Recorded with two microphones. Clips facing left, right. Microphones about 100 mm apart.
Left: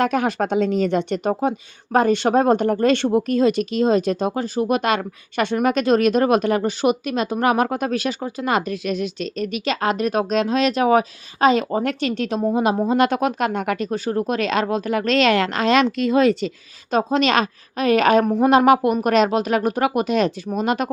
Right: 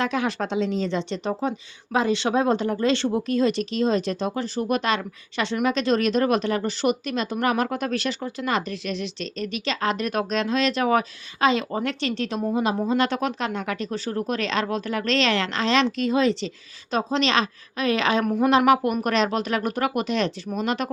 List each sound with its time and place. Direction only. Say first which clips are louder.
0.0 s speech: left 5 dB; 50° left (ahead or behind)
18.3 s a woman's voice: left 4 dB; 30° left (ahead or behind)